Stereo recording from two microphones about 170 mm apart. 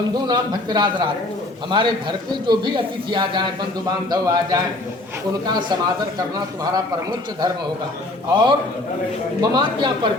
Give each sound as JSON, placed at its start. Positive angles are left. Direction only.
{"t": 0.3, "sound": "a man's voice", "side_deg": -25}
{"t": 8.3, "sound": "a man's voice", "side_deg": -25}